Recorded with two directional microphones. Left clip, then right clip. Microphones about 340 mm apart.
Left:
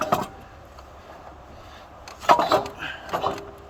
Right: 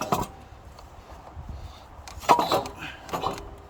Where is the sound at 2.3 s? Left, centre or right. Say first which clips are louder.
Left 3 dB; right.